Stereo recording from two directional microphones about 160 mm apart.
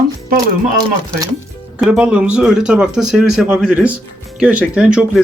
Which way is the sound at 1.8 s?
5° right (ahead or behind).